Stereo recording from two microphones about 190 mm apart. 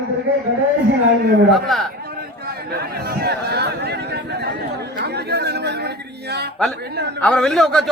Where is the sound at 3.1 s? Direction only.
55° right (ahead or behind).